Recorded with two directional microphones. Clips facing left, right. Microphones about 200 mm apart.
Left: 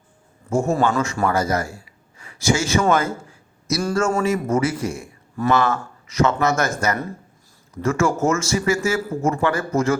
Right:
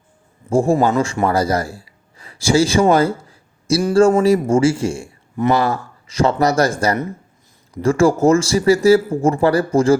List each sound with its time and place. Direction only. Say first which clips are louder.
0.5 s speech: right 4 dB; 30° right (ahead or behind)
2.9 s a sound: right 5 dB; 35° right (ahead or behind)
4.2 s speech: right 6 dB; 30° right (ahead or behind)